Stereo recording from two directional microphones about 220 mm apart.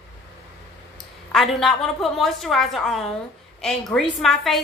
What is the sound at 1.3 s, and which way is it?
A woman's voice, centre (ahead or behind).